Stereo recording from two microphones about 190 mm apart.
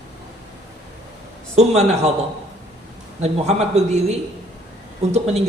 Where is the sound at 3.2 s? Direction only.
35° right (ahead or behind).